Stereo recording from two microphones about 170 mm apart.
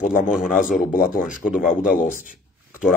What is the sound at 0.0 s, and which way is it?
Speech, 55° left (ahead or behind).